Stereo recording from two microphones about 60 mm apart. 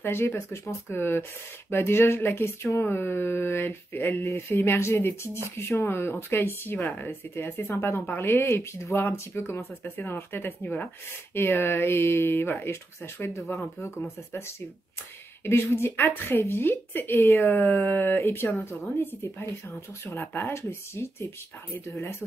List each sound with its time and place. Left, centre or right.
0.0 s speech: left
7.7 s a woman's voice: left
8.2 s speech: left
19.2 s speech: left
20.2 s speech: left